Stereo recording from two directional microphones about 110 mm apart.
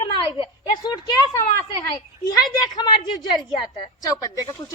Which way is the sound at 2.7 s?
40° left (ahead or behind).